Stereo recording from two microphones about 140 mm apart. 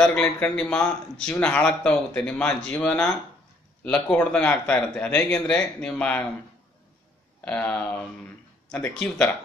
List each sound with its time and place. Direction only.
0.0 s a man's voice: 10° left (ahead or behind)
7.4 s a man's voice: 10° left (ahead or behind)